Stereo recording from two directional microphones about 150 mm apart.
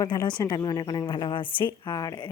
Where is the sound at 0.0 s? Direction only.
25° left (ahead or behind).